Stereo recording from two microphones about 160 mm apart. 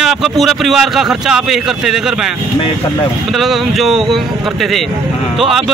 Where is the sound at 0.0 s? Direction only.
Centre (ahead or behind).